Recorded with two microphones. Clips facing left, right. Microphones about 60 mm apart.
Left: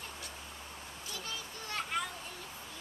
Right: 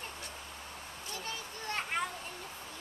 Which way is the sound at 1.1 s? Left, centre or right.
Right.